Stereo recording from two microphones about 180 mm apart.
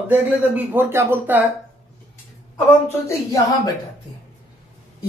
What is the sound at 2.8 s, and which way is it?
Speech, 15° left (ahead or behind).